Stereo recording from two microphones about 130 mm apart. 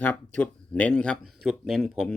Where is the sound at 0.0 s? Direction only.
10° left (ahead or behind).